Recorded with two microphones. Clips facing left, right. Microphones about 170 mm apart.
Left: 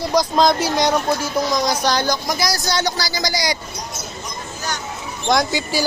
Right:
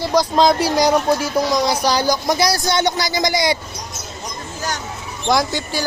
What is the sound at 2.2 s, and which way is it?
Speech, 30° right (ahead or behind).